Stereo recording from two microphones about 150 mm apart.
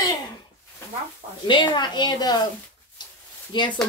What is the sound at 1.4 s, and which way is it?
A woman's voice, 30° left (ahead or behind).